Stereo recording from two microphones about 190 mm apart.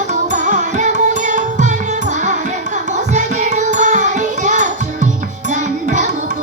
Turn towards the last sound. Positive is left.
turn(degrees=-40)  # may be behind; listen again after turning